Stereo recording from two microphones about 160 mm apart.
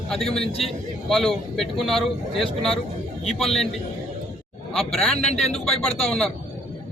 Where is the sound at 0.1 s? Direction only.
Centre (ahead or behind).